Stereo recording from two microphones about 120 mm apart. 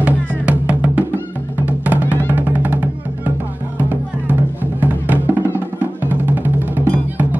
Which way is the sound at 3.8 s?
15° right (ahead or behind).